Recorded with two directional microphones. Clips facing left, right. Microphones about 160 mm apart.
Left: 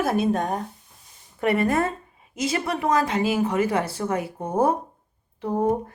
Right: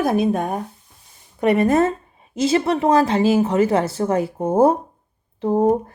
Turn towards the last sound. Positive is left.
turn(degrees=-30)  # may be behind; listen again after turning